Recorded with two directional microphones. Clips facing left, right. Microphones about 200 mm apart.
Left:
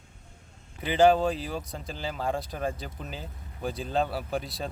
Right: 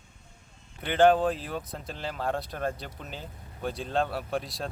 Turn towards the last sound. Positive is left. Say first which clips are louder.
# even
turn(degrees=0)  # may be behind; listen again after turning